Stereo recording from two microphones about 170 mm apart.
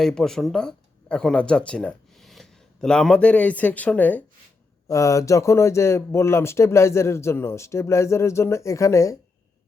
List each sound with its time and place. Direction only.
0.0 s speech: centre (ahead or behind); by 9.1 s 20° left (ahead or behind)